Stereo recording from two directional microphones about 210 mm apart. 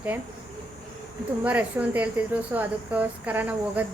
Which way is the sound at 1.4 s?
5° right (ahead or behind).